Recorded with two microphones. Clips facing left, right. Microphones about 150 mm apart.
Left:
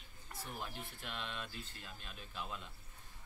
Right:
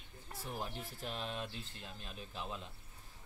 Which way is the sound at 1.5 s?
25° right (ahead or behind).